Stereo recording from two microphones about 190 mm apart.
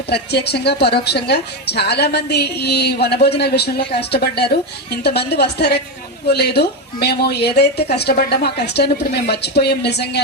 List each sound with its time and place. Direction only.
0.1 s a woman's voice: 60° left (ahead or behind)